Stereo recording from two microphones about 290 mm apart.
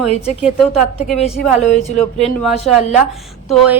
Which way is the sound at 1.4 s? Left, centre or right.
Left.